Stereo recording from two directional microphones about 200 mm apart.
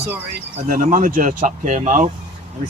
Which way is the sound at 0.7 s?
40° right (ahead or behind).